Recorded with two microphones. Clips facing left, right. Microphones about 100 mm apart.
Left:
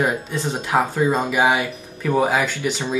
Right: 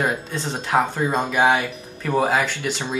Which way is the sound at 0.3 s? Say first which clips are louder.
Left 1 dB; 5° left (ahead or behind).